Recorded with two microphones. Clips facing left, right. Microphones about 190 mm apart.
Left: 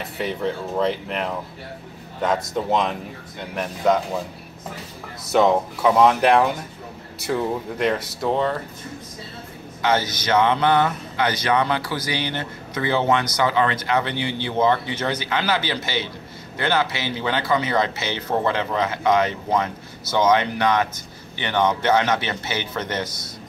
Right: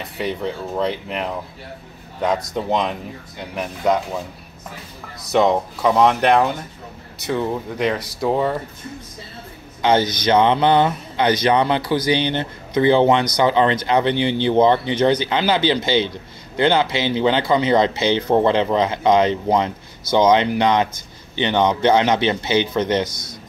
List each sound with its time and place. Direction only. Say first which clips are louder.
0.0 s speech: right 1 dB; centre (ahead or behind)
2.5 s speech: right 1 dB; 5° left (ahead or behind)
5.3 s speech: right 1 dB; 5° left (ahead or behind)
9.8 s a man's voice: right 4 dB; 25° right (ahead or behind)
23.0 s a man's voice: even; 10° left (ahead or behind)